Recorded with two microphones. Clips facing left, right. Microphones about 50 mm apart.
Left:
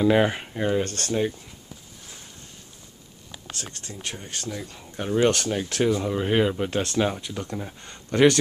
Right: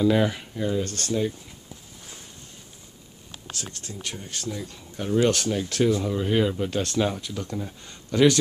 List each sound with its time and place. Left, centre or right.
0.0 s speech: left
4.3 s speech: left
5.9 s speech: centre
6.1 s speech: left
6.8 s speech: centre